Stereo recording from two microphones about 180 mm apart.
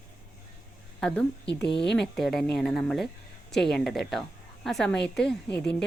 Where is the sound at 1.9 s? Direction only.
5° left (ahead or behind).